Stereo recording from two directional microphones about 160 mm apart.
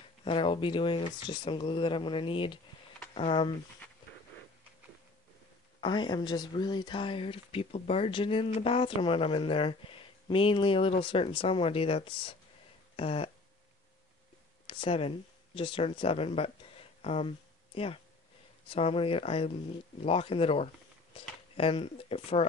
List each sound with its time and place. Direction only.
0.2 s speech: 30° left (ahead or behind)
5.8 s speech: 30° left (ahead or behind)
14.7 s speech: 35° left (ahead or behind)
18.7 s speech: 35° left (ahead or behind)